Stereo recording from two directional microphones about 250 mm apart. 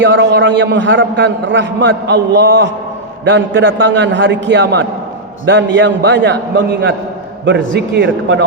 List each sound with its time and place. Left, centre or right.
0.0 s a man's voice: right
7.4 s a man's voice: right